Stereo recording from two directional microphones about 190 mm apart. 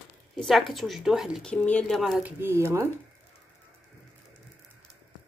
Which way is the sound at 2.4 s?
15° right (ahead or behind).